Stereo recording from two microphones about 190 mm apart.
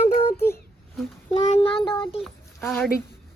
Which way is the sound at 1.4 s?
30° left (ahead or behind).